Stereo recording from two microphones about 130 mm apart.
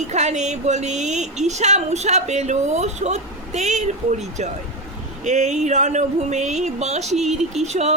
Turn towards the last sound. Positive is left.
turn(degrees=-60)  # may be behind; listen again after turning